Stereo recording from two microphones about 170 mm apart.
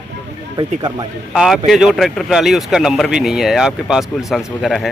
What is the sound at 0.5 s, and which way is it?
Speech, 25° right (ahead or behind).